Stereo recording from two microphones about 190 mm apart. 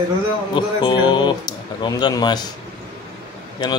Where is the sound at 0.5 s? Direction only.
25° left (ahead or behind).